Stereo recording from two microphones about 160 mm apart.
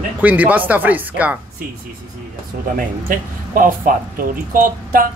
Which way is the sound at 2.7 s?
60° right (ahead or behind).